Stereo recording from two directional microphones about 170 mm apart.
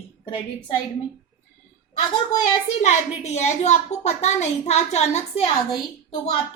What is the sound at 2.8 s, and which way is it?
A woman's voice, 40° left (ahead or behind).